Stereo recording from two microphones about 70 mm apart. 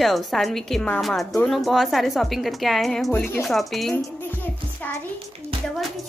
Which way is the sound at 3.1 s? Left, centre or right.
Left.